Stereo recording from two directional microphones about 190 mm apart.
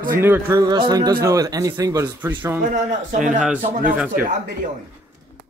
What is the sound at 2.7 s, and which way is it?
Speech, 40° right (ahead or behind).